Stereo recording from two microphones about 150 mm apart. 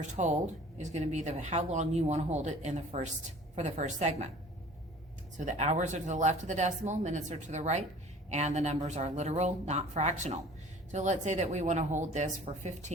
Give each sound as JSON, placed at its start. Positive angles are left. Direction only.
{"t": 0.2, "sound": "speech", "side_deg": -55}
{"t": 5.5, "sound": "speech", "side_deg": -50}